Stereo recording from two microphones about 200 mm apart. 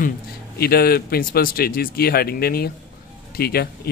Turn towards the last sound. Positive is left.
turn(degrees=50)  # may be behind; listen again after turning